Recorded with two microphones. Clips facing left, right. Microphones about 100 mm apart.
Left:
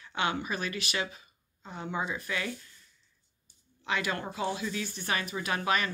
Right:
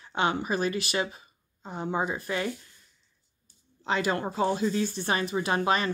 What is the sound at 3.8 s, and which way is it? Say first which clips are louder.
Speech: right 5 dB; 30° right (ahead or behind).